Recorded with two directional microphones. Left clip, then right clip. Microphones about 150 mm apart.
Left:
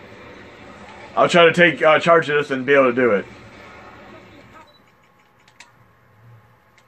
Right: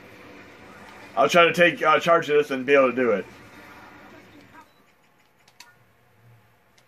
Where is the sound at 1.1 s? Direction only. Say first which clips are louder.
Left 4 dB; 50° left (ahead or behind).